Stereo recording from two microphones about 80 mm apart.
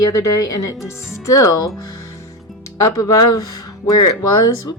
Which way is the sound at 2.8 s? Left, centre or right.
Left.